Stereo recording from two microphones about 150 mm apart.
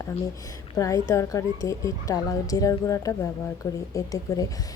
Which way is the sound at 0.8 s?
20° left (ahead or behind).